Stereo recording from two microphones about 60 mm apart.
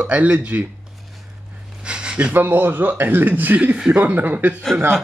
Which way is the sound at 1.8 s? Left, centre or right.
Centre.